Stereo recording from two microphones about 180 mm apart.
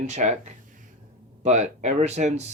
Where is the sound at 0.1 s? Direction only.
40° right (ahead or behind).